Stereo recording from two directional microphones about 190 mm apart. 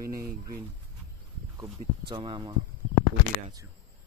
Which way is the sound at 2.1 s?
25° right (ahead or behind).